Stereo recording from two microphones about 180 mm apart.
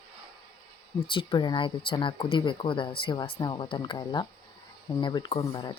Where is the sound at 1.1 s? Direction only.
30° left (ahead or behind).